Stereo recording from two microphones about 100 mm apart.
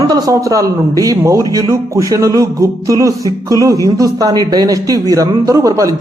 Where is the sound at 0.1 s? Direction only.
35° right (ahead or behind).